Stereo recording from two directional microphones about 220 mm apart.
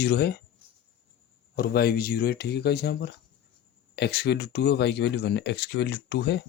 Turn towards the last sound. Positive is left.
turn(degrees=50)  # may be behind; listen again after turning